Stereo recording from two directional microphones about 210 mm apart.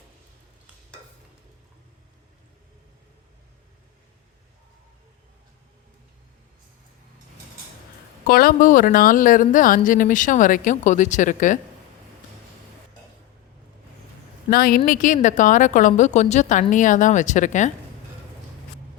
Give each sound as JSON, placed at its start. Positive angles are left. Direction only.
{"t": 8.3, "sound": "speech", "side_deg": 45}
{"t": 14.5, "sound": "a woman's voice", "side_deg": 45}